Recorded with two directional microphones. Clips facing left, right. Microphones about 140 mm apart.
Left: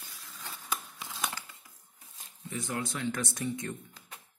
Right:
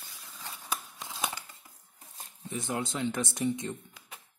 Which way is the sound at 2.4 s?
20° right (ahead or behind).